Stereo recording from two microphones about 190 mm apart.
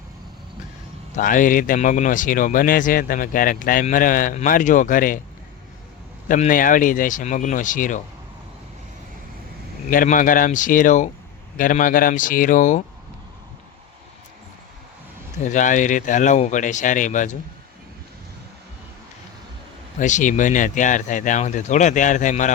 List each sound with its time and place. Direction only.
1.1 s speech: 45° left (ahead or behind)
6.2 s speech: 45° left (ahead or behind)
9.9 s speech: 45° left (ahead or behind)
15.4 s speech: 40° left (ahead or behind)
20.0 s speech: 40° left (ahead or behind)